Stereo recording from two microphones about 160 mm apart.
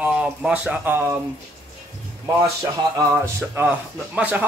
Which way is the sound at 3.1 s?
15° right (ahead or behind).